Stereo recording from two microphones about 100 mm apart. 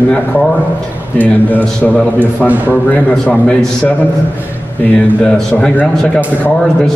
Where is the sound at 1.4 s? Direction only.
20° left (ahead or behind).